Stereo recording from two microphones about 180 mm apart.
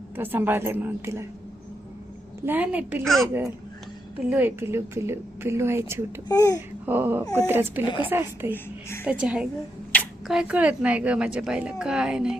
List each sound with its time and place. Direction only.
0.2 s a woman's voice: 10° right (ahead or behind)
2.5 s a woman's voice: 10° right (ahead or behind)
4.3 s a woman's voice: 10° right (ahead or behind)
6.2 s speech: 20° left (ahead or behind)
6.8 s a woman's voice: 10° right (ahead or behind)
7.9 s speech: 25° left (ahead or behind)
8.1 s a woman's voice: 15° right (ahead or behind)
8.5 s speech: 15° left (ahead or behind)
9.0 s a woman's voice: 5° right (ahead or behind)